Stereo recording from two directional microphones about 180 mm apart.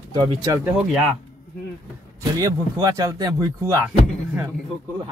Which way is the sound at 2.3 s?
20° right (ahead or behind).